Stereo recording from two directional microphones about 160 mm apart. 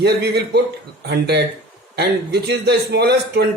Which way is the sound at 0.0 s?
90° right.